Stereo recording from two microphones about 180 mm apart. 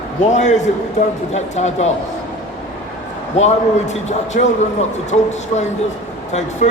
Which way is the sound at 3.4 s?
40° left (ahead or behind).